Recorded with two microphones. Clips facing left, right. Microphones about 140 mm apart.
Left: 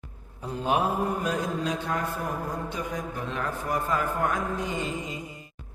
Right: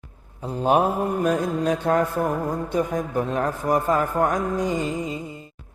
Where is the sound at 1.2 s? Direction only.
50° right (ahead or behind).